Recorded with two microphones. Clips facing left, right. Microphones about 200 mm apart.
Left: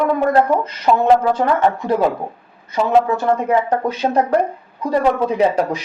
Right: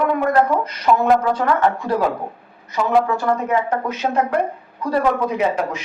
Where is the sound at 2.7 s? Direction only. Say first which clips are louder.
Left 2 dB; 25° left (ahead or behind).